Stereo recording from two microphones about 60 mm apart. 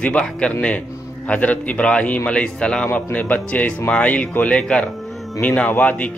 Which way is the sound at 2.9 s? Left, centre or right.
Left.